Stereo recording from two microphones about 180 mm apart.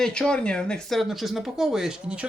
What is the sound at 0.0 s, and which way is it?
Speech, 5° left (ahead or behind).